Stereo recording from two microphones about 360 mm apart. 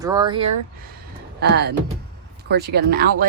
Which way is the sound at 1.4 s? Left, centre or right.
Right.